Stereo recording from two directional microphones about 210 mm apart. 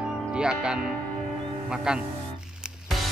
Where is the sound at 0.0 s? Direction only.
5° right (ahead or behind).